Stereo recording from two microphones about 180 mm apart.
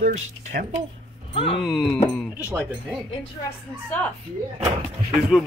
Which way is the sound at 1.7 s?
5° left (ahead or behind).